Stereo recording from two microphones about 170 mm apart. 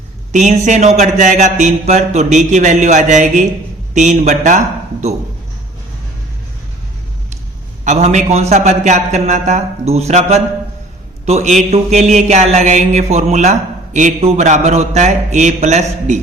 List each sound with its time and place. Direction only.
0.3 s a man's voice: 45° right (ahead or behind)
7.9 s a man's voice: 40° right (ahead or behind)